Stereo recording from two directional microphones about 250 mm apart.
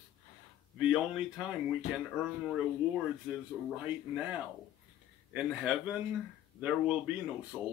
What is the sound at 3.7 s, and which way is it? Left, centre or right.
A man's voice, centre.